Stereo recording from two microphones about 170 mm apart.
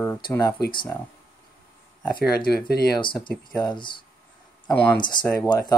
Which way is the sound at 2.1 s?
70° left (ahead or behind).